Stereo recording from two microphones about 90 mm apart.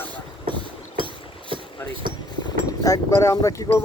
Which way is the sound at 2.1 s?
55° right (ahead or behind).